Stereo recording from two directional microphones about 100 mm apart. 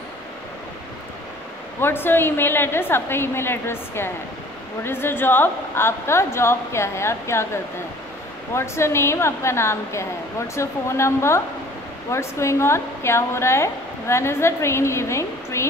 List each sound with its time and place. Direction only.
1.8 s a woman's voice: 20° left (ahead or behind)